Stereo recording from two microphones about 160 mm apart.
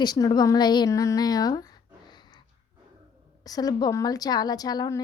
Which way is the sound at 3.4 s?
25° left (ahead or behind).